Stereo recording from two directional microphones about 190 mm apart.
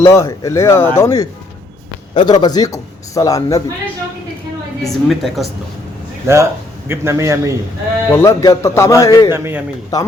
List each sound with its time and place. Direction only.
0.1 s a man's voice: 15° left (ahead or behind)
4.8 s a woman's voice: centre (ahead or behind)
6.2 s a man's voice: 15° right (ahead or behind)
8.1 s a man's voice: 15° left (ahead or behind)
9.3 s a man's voice: 10° right (ahead or behind)